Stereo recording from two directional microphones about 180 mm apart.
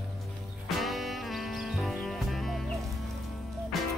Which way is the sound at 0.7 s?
Centre (ahead or behind).